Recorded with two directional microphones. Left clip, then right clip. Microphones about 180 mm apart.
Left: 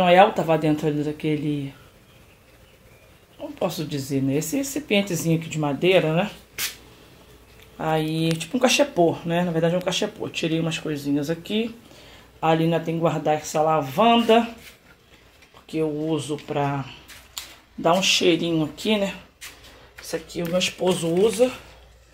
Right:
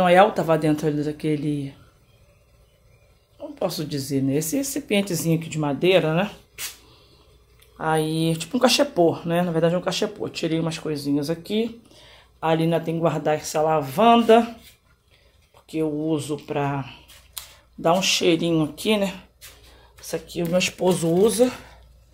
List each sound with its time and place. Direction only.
0.0 s speech: centre (ahead or behind)
3.3 s speech: centre (ahead or behind)
7.7 s speech: 10° right (ahead or behind)
15.7 s speech: centre (ahead or behind)
20.1 s speech: 35° right (ahead or behind)